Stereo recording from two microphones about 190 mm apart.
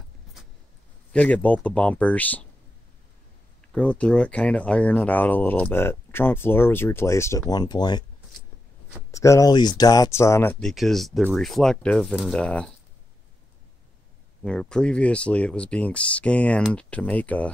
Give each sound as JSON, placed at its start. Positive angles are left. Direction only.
{"t": 1.1, "sound": "speech", "side_deg": 10}
{"t": 3.7, "sound": "speech", "side_deg": 5}
{"t": 9.1, "sound": "speech", "side_deg": 15}
{"t": 14.4, "sound": "speech", "side_deg": 5}